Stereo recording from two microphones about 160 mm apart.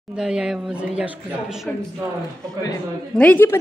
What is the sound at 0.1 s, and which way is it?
Speech, 5° right (ahead or behind).